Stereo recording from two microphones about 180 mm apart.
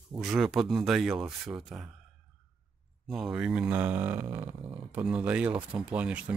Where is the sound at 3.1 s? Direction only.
5° right (ahead or behind).